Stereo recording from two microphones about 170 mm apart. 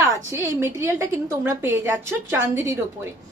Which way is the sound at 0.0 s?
15° right (ahead or behind).